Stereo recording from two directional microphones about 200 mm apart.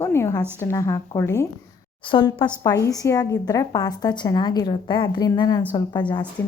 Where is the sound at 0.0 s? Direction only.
15° left (ahead or behind).